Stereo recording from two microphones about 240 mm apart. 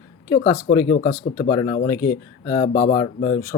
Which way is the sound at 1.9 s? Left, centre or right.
Centre.